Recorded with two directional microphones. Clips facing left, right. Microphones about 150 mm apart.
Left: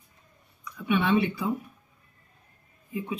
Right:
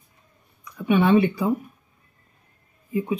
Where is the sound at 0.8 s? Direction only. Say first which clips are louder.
Right 6 dB; 40° right (ahead or behind).